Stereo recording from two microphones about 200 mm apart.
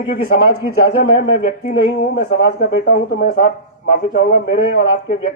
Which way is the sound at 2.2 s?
55° left (ahead or behind).